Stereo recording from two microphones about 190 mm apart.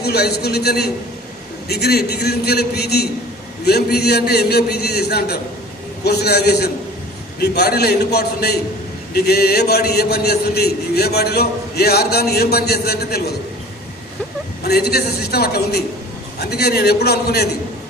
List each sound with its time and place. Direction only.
0.0 s a man's voice: 60° left (ahead or behind)
14.6 s a man's voice: 55° left (ahead or behind)